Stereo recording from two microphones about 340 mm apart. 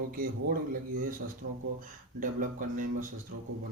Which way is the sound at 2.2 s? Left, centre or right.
Right.